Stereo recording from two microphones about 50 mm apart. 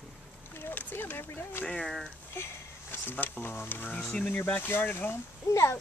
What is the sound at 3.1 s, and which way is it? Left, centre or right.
Speech, left.